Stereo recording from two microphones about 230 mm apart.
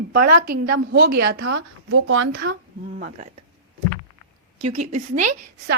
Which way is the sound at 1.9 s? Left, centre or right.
Right.